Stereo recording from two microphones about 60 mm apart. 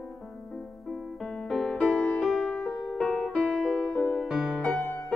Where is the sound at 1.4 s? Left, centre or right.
Centre.